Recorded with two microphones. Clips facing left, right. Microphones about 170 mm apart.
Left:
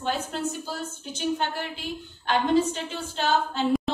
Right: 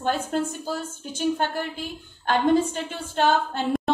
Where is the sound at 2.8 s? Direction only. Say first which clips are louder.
Right 4 dB; 55° right (ahead or behind).